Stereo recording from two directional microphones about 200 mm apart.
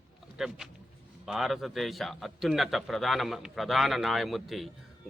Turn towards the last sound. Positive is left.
turn(degrees=0)  # may be behind; listen again after turning